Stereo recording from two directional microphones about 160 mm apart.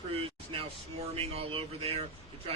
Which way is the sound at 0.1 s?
35° right (ahead or behind).